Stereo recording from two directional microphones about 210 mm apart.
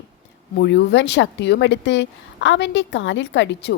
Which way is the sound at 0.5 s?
55° left (ahead or behind).